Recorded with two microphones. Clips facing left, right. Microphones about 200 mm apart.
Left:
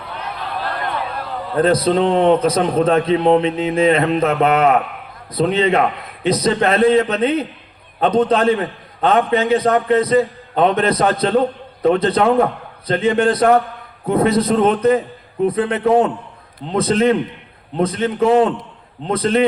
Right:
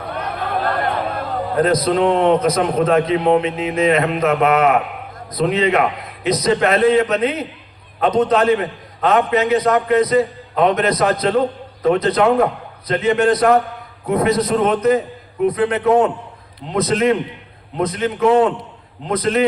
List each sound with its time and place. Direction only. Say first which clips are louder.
0.1 s a sound: right 4 dB; 50° right (ahead or behind)
1.5 s a man's voice: left 2 dB; 30° left (ahead or behind)
19.1 s a man's voice: left 1 dB; 30° left (ahead or behind)